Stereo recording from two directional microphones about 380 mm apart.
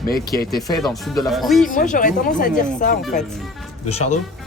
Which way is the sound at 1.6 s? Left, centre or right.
Centre.